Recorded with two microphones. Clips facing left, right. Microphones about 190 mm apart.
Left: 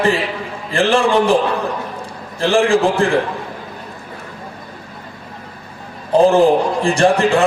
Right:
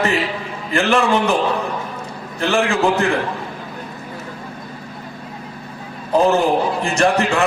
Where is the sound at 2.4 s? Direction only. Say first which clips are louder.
Left 4 dB; 30° left (ahead or behind).